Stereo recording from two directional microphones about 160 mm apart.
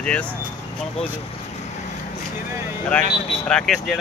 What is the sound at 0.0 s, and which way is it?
Speech, 5° left (ahead or behind).